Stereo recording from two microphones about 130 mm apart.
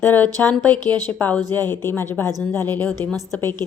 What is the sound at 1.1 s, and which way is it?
A woman's voice, 15° left (ahead or behind).